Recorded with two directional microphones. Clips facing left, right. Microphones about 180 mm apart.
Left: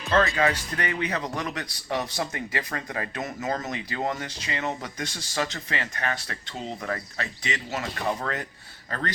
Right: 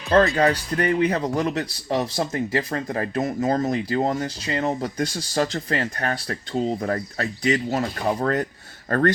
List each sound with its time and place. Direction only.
0.3 s speech: 40° right (ahead or behind)
8.9 s speech: 50° right (ahead or behind)